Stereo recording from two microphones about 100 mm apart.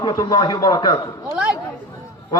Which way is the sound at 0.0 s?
45° left (ahead or behind).